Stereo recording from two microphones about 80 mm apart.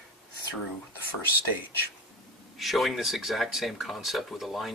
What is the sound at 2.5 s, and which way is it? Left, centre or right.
Speech, centre.